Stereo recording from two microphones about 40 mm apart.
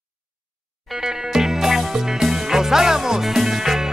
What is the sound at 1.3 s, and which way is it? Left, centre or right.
Music, centre.